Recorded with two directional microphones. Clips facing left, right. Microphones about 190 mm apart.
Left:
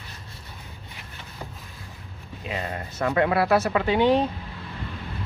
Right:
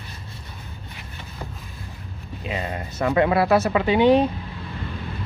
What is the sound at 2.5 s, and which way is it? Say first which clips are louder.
Speech: right 2 dB; 20° right (ahead or behind).